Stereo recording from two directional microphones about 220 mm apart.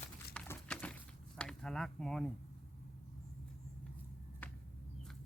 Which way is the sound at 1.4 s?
Centre (ahead or behind).